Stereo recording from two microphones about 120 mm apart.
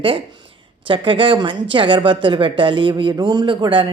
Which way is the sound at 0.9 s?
45° right (ahead or behind).